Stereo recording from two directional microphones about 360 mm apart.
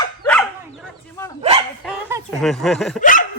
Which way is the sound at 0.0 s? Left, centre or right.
Centre.